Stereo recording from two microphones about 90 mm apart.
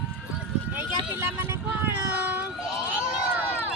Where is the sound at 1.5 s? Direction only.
25° right (ahead or behind).